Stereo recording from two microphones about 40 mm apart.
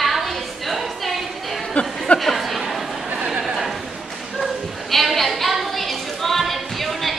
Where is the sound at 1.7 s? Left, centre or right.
Left.